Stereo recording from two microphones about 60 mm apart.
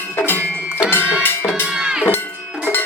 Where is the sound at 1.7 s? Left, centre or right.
Centre.